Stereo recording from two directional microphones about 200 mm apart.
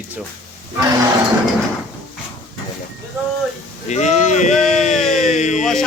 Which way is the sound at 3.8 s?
35° left (ahead or behind).